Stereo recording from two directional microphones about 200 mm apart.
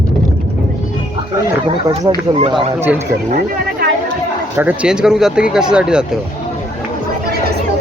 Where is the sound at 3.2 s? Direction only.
40° right (ahead or behind).